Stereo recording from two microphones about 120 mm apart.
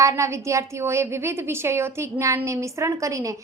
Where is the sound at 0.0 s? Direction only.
25° right (ahead or behind).